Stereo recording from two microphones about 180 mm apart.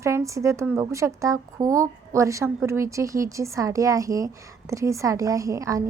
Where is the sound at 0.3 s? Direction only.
15° right (ahead or behind).